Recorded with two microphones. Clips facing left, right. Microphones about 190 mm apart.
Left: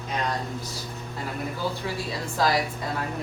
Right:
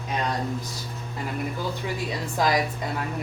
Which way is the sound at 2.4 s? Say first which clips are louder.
Even; 15° right (ahead or behind).